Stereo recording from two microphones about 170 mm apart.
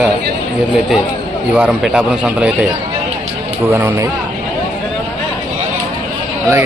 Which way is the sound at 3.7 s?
15° right (ahead or behind).